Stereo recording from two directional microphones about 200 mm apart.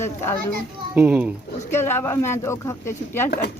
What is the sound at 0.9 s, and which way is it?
Speech, 10° right (ahead or behind).